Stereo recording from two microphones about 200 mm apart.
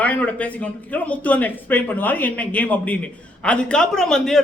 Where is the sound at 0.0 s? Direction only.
5° left (ahead or behind).